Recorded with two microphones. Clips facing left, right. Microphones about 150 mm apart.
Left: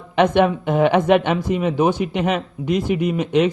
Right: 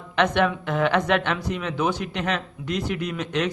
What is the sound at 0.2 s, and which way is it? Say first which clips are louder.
A man's voice: left 6 dB; 55° left (ahead or behind).